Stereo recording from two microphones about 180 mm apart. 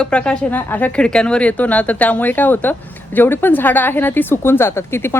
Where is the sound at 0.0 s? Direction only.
5° left (ahead or behind).